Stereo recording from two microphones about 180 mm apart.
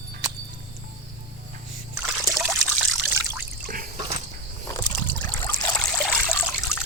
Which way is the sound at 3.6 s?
55° right (ahead or behind).